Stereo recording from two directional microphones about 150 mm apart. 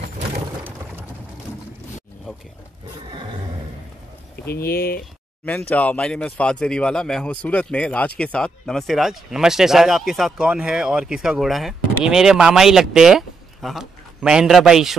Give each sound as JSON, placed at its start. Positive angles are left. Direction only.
{"t": 4.5, "sound": "speech", "side_deg": 90}
{"t": 5.7, "sound": "speech", "side_deg": 10}